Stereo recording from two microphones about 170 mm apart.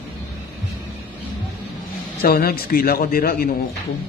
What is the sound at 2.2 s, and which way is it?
A man's voice, 65° left (ahead or behind).